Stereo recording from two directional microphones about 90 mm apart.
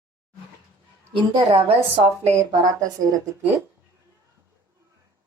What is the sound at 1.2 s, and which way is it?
Speech, 80° right.